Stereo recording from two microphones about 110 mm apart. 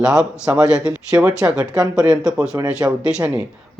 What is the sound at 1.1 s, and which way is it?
Speech, 30° right (ahead or behind).